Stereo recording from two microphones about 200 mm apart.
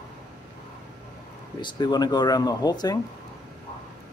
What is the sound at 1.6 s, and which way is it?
Speech, 20° left (ahead or behind).